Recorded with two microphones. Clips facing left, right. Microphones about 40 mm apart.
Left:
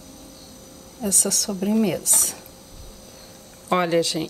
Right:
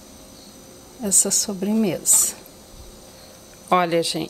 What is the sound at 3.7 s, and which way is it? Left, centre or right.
Speech, centre.